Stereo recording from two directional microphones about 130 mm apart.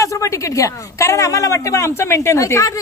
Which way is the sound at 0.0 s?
25° left (ahead or behind).